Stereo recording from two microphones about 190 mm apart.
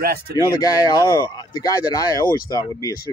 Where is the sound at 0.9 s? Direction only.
25° left (ahead or behind).